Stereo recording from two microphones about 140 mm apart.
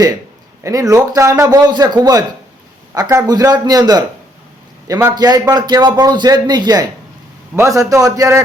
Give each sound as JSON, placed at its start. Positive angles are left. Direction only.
{"t": 0.6, "sound": "a man's voice", "side_deg": -25}
{"t": 5.1, "sound": "a man's voice", "side_deg": -30}